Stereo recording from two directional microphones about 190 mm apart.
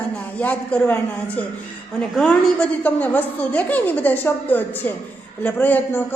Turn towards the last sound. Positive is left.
turn(degrees=10)  # may be behind; listen again after turning